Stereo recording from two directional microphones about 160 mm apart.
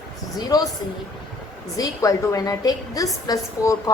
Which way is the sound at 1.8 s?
20° left (ahead or behind).